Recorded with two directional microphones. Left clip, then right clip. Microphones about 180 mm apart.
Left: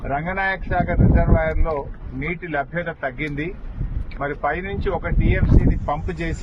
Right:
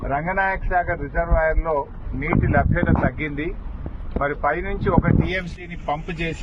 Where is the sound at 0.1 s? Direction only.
20° left (ahead or behind).